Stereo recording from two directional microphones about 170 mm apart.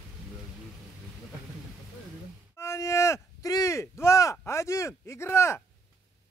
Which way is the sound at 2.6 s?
15° left (ahead or behind).